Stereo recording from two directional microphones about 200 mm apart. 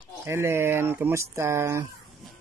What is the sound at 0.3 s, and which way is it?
Speech, 10° right (ahead or behind).